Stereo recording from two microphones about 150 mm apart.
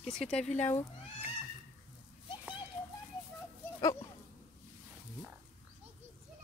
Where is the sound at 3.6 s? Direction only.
15° left (ahead or behind).